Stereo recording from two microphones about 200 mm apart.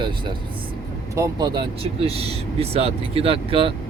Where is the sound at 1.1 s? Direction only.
20° right (ahead or behind).